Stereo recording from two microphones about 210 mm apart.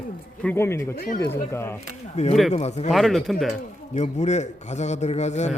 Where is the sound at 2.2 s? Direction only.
30° left (ahead or behind).